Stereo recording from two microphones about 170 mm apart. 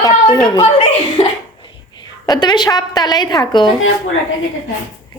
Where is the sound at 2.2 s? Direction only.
25° left (ahead or behind).